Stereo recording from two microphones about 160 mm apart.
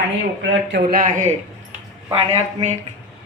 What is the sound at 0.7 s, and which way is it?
Speech, 60° right (ahead or behind).